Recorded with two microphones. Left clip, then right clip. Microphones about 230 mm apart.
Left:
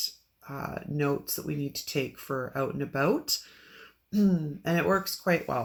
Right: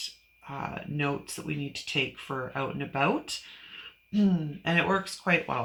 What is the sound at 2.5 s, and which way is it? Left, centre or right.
Speech, centre.